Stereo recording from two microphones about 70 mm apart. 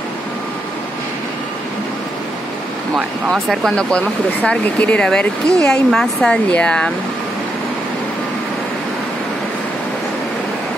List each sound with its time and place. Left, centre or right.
3.3 s speech: centre
3.7 s speech: centre